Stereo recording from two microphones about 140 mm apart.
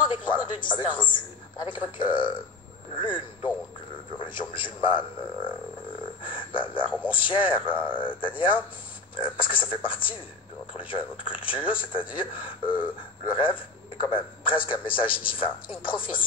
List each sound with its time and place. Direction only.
0.0 s a man's voice: 35° left (ahead or behind)